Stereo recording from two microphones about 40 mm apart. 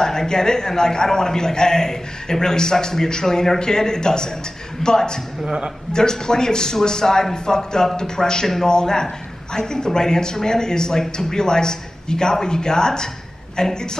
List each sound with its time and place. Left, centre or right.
0.0 s a man's voice: centre